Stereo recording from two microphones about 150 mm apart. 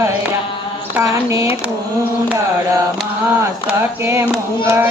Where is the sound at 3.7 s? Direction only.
15° right (ahead or behind).